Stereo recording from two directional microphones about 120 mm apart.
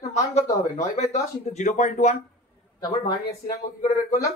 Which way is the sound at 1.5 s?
90° left.